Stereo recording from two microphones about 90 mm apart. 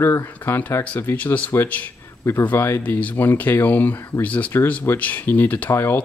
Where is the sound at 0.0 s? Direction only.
30° left (ahead or behind).